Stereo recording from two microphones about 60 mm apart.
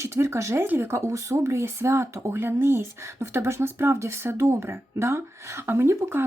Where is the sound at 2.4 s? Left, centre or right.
Right.